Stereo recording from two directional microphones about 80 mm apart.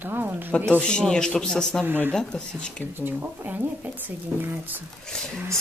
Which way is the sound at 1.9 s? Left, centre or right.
Right.